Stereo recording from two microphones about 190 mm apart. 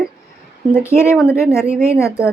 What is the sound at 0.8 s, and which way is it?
Speech, 15° left (ahead or behind).